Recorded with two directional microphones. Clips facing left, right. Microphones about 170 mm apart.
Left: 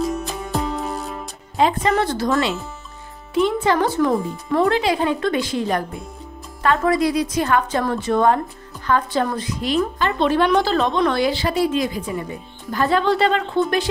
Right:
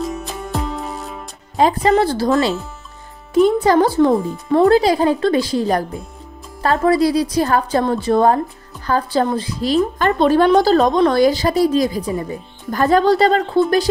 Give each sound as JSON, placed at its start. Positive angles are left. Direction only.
{"t": 0.0, "sound": "music", "side_deg": 0}
{"t": 1.6, "sound": "a woman's voice", "side_deg": -35}
{"t": 3.3, "sound": "a woman's voice", "side_deg": -40}
{"t": 9.9, "sound": "a woman's voice", "side_deg": -45}